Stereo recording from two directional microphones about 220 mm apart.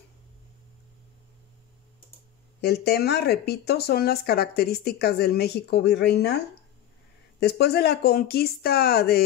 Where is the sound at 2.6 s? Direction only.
50° left (ahead or behind).